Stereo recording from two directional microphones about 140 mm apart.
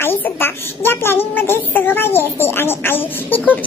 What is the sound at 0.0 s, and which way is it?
A child's voice, 15° left (ahead or behind).